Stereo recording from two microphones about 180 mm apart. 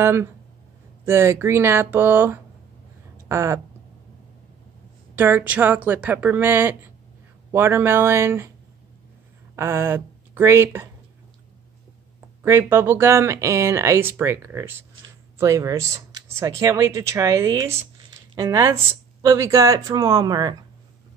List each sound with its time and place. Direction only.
0.0 s speech: 15° right (ahead or behind)
5.1 s speech: 10° right (ahead or behind)
9.6 s speech: 15° right (ahead or behind)
12.4 s speech: 15° right (ahead or behind)